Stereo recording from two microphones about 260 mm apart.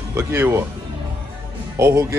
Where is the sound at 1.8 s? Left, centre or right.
Centre.